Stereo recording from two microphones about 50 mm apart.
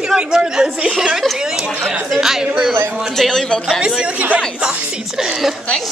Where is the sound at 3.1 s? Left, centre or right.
Centre.